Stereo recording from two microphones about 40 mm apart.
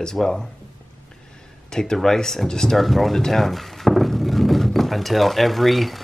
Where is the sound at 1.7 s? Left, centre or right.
Centre.